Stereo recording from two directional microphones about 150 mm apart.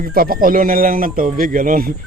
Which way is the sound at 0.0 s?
80° right.